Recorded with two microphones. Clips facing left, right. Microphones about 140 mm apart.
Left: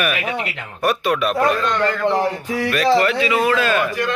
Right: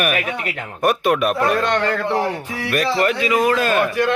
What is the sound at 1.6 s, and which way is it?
Speech, 70° right (ahead or behind).